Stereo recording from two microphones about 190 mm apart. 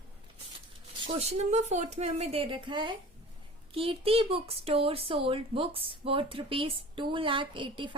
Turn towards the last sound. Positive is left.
turn(degrees=-25)  # may be behind; listen again after turning